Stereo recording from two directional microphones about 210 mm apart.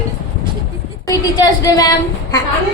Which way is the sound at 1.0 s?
20° left (ahead or behind).